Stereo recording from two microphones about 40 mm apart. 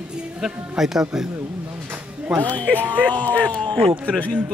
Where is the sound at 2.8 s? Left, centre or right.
Right.